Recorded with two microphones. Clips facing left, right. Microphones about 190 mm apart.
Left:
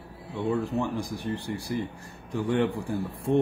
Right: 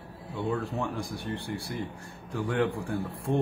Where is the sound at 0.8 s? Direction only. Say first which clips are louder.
Left 3 dB; 35° left (ahead or behind).